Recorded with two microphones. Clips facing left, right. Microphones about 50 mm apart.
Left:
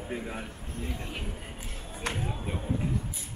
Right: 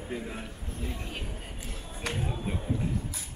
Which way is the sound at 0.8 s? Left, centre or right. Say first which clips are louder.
Left 1 dB; left.